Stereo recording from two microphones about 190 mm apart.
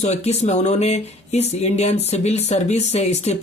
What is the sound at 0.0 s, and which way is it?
Speech, 35° left (ahead or behind).